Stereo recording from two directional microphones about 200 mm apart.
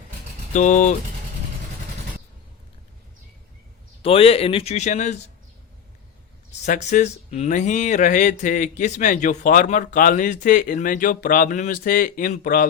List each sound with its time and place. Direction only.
0.5 s speech: 40° left (ahead or behind)
4.0 s speech: 30° left (ahead or behind)
6.7 s speech: 35° left (ahead or behind)